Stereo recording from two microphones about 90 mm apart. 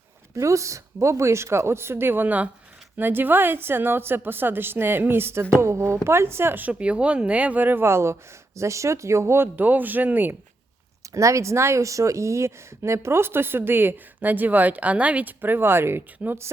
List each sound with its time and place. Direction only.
0.3 s a woman's voice: 35° right (ahead or behind)
11.1 s a woman's voice: 35° right (ahead or behind); by 16.4 s 20° right (ahead or behind)